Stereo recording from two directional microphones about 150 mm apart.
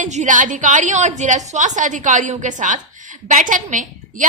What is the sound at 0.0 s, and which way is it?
A woman's voice, 55° right (ahead or behind).